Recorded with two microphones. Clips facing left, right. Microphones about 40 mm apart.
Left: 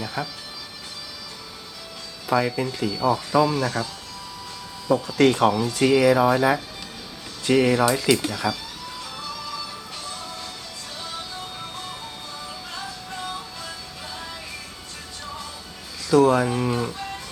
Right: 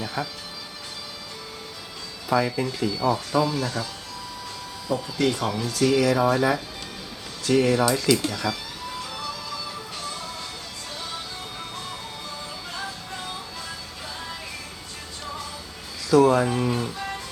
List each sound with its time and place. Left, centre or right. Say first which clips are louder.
0.0 s speech: even; centre
2.2 s speech: left 1 dB; centre
3.5 s speech: left 3 dB; left
5.1 s speech: left 7 dB; left
5.6 s speech: right 1 dB; left
16.0 s speech: even; centre